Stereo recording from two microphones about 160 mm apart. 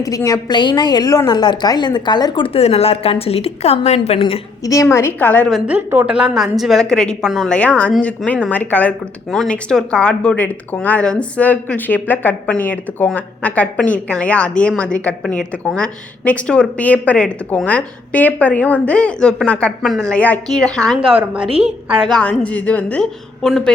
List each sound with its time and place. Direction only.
0.0 s a woman's voice: 20° left (ahead or behind); by 4.4 s 35° left (ahead or behind)
4.6 s speech: 20° left (ahead or behind)
5.5 s a woman's voice: 5° right (ahead or behind)
21.1 s a woman's voice: 5° right (ahead or behind)
22.0 s a woman's voice: 5° left (ahead or behind)